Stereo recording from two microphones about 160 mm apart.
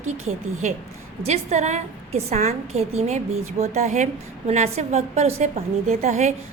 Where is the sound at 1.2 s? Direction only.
45° right (ahead or behind).